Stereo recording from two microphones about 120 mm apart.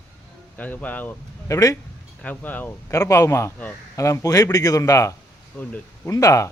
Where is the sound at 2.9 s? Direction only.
25° left (ahead or behind).